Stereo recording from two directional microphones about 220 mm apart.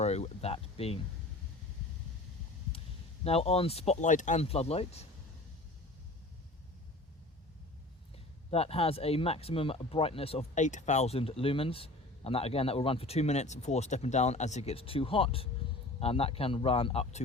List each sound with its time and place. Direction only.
0.0 s speech: 30° left (ahead or behind)
3.2 s speech: 25° left (ahead or behind)
8.4 s speech: 25° left (ahead or behind)